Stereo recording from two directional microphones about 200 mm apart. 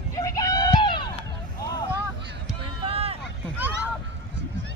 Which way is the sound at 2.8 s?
30° right (ahead or behind).